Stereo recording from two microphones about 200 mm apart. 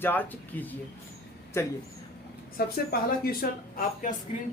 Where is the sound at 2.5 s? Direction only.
50° left (ahead or behind).